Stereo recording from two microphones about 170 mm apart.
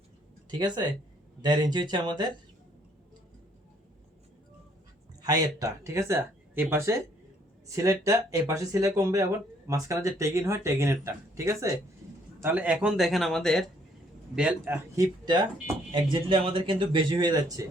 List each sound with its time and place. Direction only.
0.6 s speech: 25° right (ahead or behind)
5.2 s a man's voice: 20° right (ahead or behind); by 13.7 s 5° left (ahead or behind)
14.3 s speech: 10° right (ahead or behind)